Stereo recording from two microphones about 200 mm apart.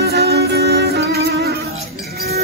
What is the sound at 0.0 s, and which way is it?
Music, 55° right (ahead or behind).